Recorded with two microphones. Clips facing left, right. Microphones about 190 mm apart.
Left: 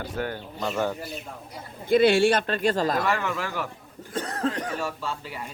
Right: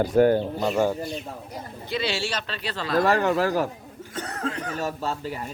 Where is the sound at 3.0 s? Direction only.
35° right (ahead or behind).